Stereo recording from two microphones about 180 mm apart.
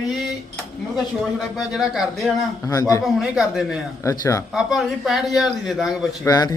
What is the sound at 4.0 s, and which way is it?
Speech, 15° left (ahead or behind).